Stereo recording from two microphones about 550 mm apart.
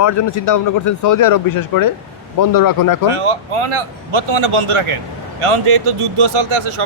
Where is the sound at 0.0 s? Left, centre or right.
Left.